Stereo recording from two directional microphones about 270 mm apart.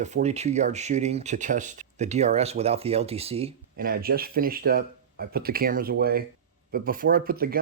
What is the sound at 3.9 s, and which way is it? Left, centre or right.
Speech, right.